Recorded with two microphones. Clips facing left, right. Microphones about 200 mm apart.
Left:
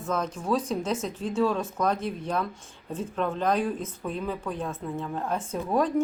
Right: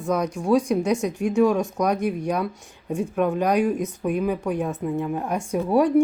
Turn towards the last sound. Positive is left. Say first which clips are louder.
# right 6 dB
turn(degrees=-10)  # may be behind; listen again after turning